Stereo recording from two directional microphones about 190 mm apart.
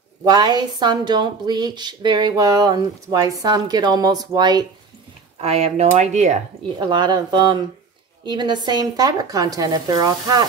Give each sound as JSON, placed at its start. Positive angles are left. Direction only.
{"t": 0.2, "sound": "a woman's voice", "side_deg": -20}
{"t": 5.4, "sound": "speech", "side_deg": -35}
{"t": 6.9, "sound": "a woman's voice", "side_deg": -25}